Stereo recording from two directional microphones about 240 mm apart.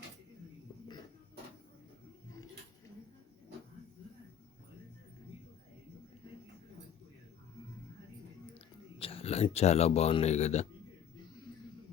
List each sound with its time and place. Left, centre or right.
8.5 s speech: left